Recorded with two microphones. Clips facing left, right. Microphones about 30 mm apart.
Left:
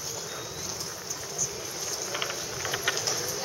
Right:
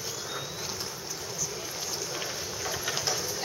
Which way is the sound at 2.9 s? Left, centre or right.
Centre.